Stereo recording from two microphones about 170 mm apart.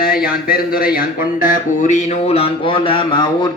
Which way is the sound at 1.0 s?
50° left (ahead or behind).